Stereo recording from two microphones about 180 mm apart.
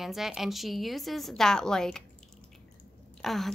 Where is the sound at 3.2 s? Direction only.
Centre (ahead or behind).